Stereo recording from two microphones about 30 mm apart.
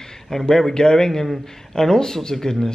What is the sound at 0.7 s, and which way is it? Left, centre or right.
Speech, centre.